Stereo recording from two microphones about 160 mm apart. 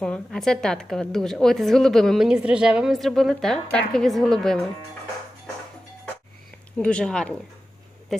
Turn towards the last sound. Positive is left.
turn(degrees=5)  # may be behind; listen again after turning